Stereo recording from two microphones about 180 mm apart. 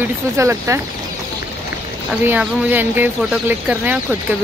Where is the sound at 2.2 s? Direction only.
10° right (ahead or behind).